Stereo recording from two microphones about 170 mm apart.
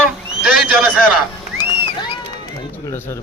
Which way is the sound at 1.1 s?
10° right (ahead or behind).